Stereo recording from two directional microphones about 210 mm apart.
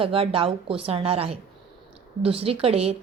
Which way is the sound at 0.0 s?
25° right (ahead or behind).